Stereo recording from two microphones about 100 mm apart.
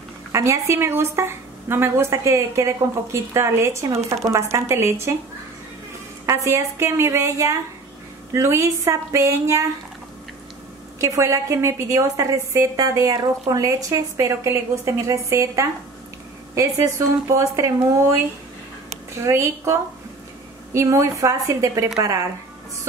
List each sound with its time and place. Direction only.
0.3 s a woman's voice: 30° right (ahead or behind)
6.2 s a woman's voice: 30° right (ahead or behind)
11.0 s a woman's voice: 30° right (ahead or behind)
19.1 s a woman's voice: 30° right (ahead or behind)